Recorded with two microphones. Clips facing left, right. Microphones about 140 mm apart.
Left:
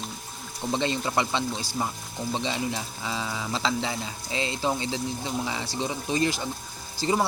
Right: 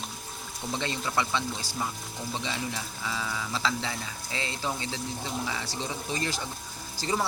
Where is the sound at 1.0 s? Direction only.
20° left (ahead or behind).